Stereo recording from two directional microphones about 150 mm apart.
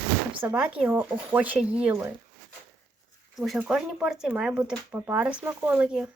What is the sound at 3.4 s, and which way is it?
Speech, 5° right (ahead or behind).